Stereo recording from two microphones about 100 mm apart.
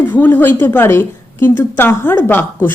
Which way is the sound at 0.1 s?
20° left (ahead or behind).